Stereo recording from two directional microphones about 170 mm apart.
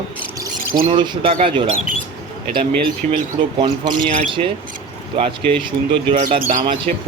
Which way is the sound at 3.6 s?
30° right (ahead or behind).